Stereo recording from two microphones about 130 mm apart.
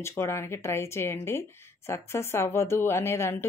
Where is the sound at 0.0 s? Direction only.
20° left (ahead or behind).